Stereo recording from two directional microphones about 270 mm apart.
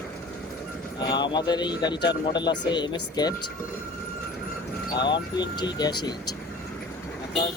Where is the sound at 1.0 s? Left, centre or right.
Centre.